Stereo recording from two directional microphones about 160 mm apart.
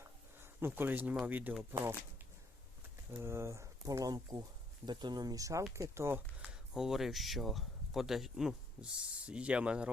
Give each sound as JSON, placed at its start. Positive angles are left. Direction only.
{"t": 0.3, "sound": "speech", "side_deg": -15}
{"t": 3.1, "sound": "speech", "side_deg": -15}